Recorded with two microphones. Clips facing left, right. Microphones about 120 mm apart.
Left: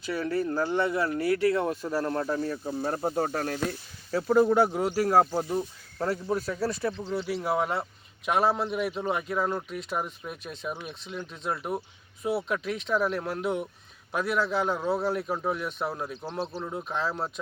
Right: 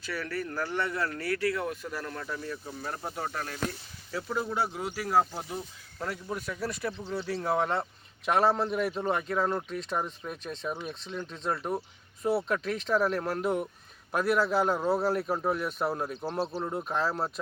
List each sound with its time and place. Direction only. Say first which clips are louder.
0.0 s speech: left 6 dB; 20° left (ahead or behind); by 17.4 s 5° right (ahead or behind)